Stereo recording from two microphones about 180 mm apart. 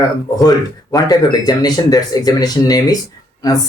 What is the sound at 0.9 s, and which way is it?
Speech, 20° left (ahead or behind).